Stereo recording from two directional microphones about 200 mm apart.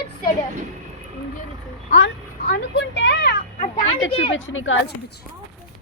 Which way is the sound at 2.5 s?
65° left (ahead or behind).